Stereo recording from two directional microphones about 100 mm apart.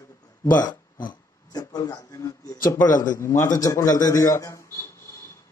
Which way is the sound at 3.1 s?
30° left (ahead or behind).